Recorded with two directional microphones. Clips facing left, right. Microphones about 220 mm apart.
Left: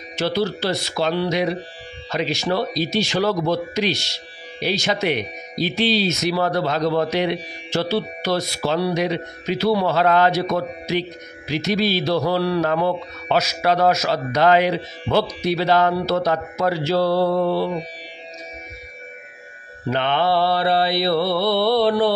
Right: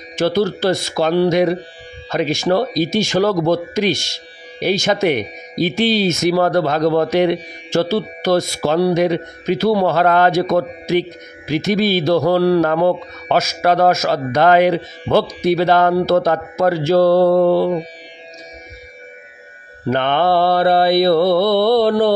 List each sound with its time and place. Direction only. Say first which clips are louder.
0.1 s speech: right 5 dB; 50° right (ahead or behind)
19.9 s speech: right 4 dB; 50° right (ahead or behind)